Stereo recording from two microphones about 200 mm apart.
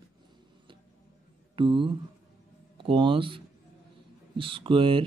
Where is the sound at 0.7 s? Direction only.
25° right (ahead or behind).